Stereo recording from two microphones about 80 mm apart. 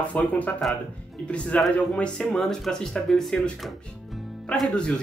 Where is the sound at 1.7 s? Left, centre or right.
Centre.